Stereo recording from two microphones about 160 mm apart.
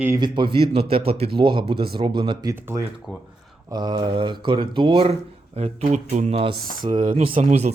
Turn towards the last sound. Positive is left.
turn(degrees=-45)  # may be behind; listen again after turning